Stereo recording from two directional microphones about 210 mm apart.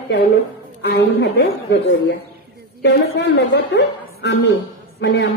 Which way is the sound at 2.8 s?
55° left (ahead or behind).